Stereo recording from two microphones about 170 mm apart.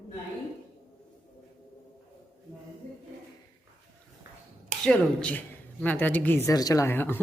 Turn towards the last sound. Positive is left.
turn(degrees=10)  # may be behind; listen again after turning